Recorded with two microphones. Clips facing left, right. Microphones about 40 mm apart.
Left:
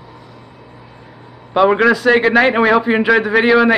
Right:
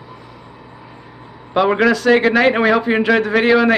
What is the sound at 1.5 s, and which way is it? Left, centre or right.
A man's voice, centre.